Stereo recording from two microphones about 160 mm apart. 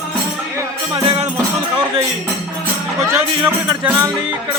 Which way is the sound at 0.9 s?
40° right (ahead or behind).